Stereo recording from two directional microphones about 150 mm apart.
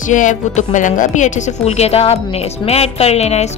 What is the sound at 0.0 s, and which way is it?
Speech, 60° left (ahead or behind).